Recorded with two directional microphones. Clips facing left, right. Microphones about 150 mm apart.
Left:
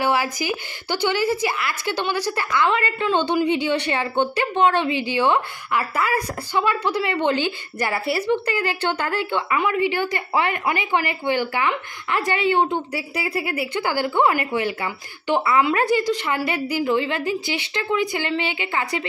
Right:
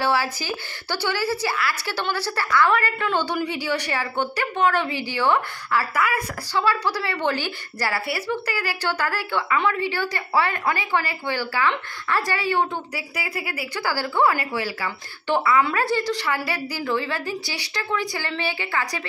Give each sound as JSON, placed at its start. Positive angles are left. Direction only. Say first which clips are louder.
{"t": 0.0, "sound": "a woman's voice", "louder": "left 2 dB", "side_deg": 15}